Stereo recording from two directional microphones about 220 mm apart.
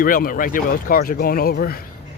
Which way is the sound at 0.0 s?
40° left (ahead or behind).